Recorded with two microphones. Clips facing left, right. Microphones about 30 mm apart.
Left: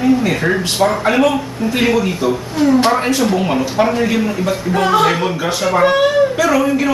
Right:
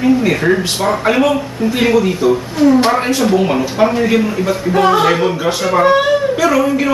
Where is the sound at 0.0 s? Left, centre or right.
Centre.